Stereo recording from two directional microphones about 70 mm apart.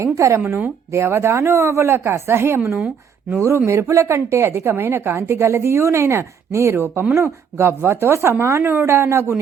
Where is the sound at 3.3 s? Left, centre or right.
Right.